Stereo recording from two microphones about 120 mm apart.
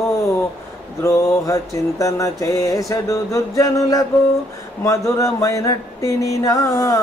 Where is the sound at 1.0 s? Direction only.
25° left (ahead or behind).